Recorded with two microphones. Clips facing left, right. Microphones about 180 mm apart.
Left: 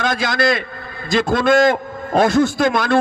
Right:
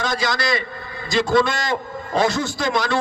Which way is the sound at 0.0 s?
55° left (ahead or behind).